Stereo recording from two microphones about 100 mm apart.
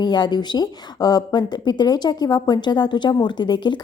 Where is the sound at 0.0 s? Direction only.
45° left (ahead or behind).